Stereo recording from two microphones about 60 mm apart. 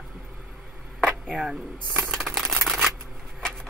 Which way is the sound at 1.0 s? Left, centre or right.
Centre.